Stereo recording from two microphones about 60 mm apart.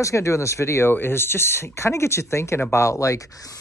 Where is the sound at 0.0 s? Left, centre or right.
Left.